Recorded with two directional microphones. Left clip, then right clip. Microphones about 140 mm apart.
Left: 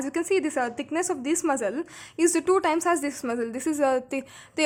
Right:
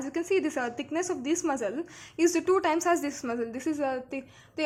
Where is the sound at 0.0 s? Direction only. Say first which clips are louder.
Left 3 dB; 30° left (ahead or behind).